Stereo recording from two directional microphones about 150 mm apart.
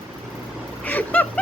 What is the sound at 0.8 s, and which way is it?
Vehicle, 10° left (ahead or behind).